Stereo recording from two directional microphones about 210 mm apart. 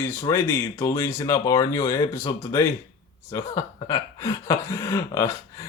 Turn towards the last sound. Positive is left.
turn(degrees=15)  # may be behind; listen again after turning